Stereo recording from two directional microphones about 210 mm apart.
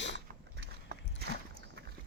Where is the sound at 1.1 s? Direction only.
50° right (ahead or behind).